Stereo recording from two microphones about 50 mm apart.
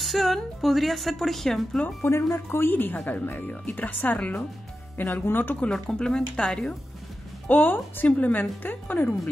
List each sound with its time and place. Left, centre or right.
0.0 s a woman's voice: centre
2.0 s speech: left
5.9 s speech: centre
7.4 s speech: left